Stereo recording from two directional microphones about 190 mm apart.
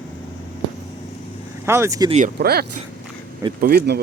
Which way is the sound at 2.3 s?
55° right (ahead or behind).